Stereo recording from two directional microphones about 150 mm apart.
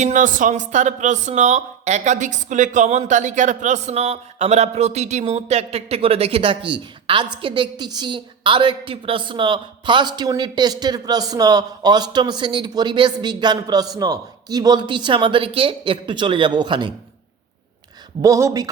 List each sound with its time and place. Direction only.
0.0 s a woman's voice: 60° right (ahead or behind); by 16.9 s 30° right (ahead or behind)
18.2 s a woman's voice: 20° right (ahead or behind)